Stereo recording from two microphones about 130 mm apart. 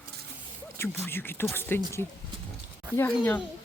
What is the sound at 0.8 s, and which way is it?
Speech, 15° left (ahead or behind).